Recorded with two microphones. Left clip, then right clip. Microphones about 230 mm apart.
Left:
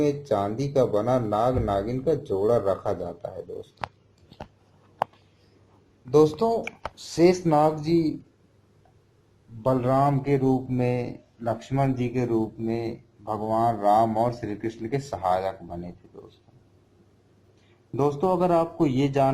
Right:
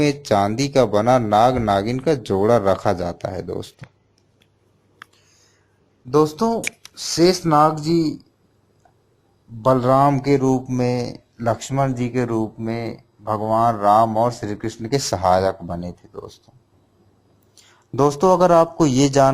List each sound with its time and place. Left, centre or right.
0.0 s speech: right
2.8 s speech: right
6.1 s speech: right
7.2 s speech: right
9.6 s speech: right
17.9 s speech: right